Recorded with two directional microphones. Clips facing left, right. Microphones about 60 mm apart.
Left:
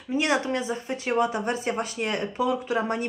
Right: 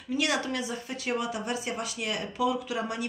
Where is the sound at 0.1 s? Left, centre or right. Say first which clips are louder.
Left 4 dB; left.